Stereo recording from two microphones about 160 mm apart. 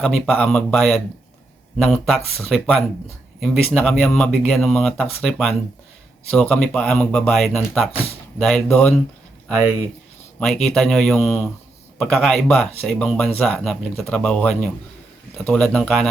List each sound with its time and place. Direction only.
0.0 s speech: 5° left (ahead or behind)
10.4 s speech: 5° left (ahead or behind)